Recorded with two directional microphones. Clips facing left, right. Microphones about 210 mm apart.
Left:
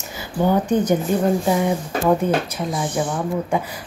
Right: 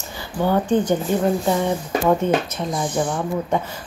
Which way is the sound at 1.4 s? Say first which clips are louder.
Left 1 dB; 10° left (ahead or behind).